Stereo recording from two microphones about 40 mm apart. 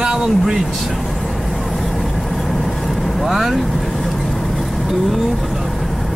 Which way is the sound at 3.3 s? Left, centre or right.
Centre.